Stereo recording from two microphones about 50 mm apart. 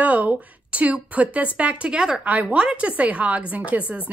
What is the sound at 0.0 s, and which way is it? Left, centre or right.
A woman's voice, right.